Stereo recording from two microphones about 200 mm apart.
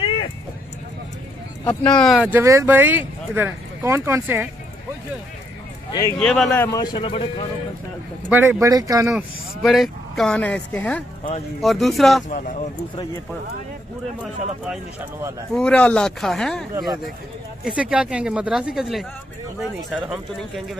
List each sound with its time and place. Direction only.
1.6 s speech: 20° left (ahead or behind)
1.9 s speech: centre (ahead or behind)
6.1 s speech: centre (ahead or behind)
6.8 s speech: 25° left (ahead or behind)
8.3 s speech: 10° right (ahead or behind)
9.1 s speech: centre (ahead or behind)
12.3 s speech: 40° left (ahead or behind)
14.2 s speech: 5° right (ahead or behind)
16.7 s speech: 20° right (ahead or behind)
17.6 s speech: 5° right (ahead or behind)